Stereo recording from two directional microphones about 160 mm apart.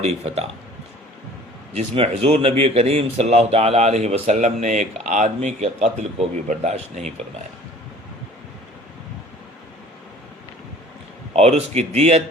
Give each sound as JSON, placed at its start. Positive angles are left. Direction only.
{"t": 0.0, "sound": "speech", "side_deg": -40}
{"t": 1.7, "sound": "speech", "side_deg": -40}
{"t": 11.3, "sound": "speech", "side_deg": -40}